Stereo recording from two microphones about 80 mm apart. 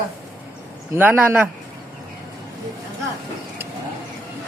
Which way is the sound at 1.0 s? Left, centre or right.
Right.